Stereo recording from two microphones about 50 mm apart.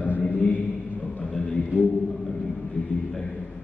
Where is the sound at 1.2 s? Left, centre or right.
Centre.